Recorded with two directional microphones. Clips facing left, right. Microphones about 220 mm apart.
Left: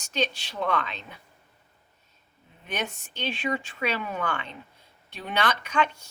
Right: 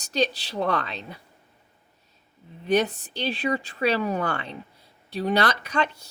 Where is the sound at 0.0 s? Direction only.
35° right (ahead or behind).